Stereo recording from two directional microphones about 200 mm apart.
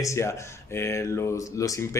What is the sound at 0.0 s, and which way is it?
Speech, 15° left (ahead or behind).